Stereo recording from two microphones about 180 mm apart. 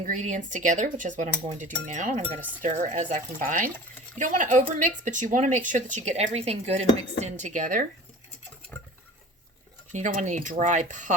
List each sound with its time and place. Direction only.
0.0 s speech: 45° right (ahead or behind)
9.9 s speech: 45° right (ahead or behind)